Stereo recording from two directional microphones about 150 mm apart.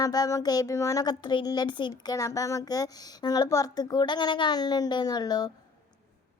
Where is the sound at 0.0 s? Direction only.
25° left (ahead or behind).